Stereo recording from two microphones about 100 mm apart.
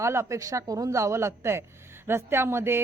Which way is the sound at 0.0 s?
30° right (ahead or behind).